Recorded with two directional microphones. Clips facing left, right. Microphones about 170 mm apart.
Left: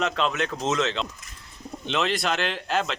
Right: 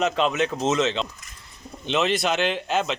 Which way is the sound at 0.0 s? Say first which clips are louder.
Right 3 dB; 5° right (ahead or behind).